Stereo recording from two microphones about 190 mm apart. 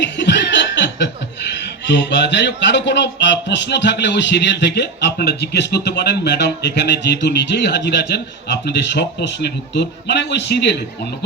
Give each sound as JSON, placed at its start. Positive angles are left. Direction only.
{"t": 0.0, "sound": "chuckle", "side_deg": 65}
{"t": 1.9, "sound": "speech", "side_deg": 65}